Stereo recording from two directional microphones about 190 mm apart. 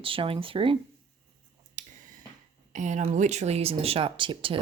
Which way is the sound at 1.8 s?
40° right (ahead or behind).